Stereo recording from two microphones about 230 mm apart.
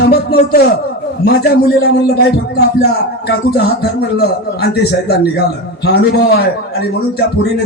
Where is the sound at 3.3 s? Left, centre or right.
Left.